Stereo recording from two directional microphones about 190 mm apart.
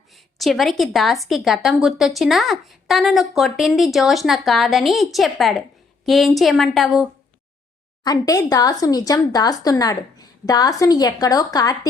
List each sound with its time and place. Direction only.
0.1 s a woman's voice: centre (ahead or behind)
8.0 s speech: 20° left (ahead or behind)